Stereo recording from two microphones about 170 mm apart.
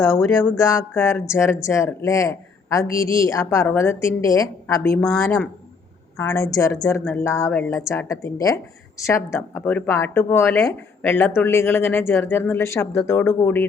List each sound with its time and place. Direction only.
0.0 s a woman's voice: 15° left (ahead or behind)